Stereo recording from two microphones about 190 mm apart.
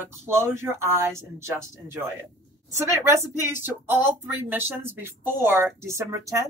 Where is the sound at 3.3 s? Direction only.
10° right (ahead or behind).